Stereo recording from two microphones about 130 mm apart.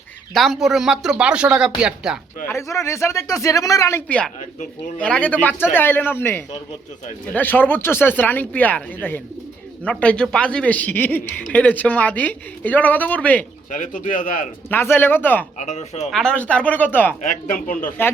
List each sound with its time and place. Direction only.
0.3 s speech: centre (ahead or behind)
2.5 s speech: 20° left (ahead or behind)
4.9 s speech: 10° left (ahead or behind)
13.7 s speech: 80° left
14.7 s speech: 15° left (ahead or behind)
15.5 s speech: 60° left (ahead or behind)
16.1 s speech: 10° left (ahead or behind)
17.7 s a man's voice: 90° left